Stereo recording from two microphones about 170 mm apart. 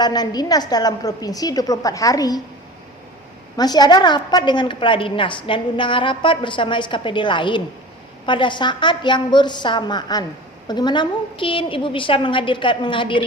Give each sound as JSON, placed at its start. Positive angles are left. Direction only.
{"t": 0.0, "sound": "a woman's voice", "side_deg": 25}
{"t": 3.6, "sound": "a woman's voice", "side_deg": 25}